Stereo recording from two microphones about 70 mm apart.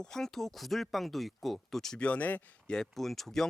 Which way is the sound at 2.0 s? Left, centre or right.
Left.